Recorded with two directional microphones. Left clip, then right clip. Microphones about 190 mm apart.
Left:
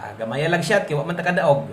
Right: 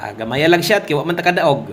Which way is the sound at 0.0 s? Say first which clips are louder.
Right 7 dB; 40° right (ahead or behind).